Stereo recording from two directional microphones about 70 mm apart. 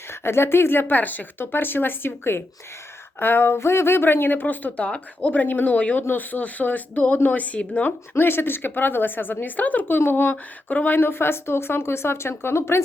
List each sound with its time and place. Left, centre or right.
0.1 s speech: left
8.1 s speech: left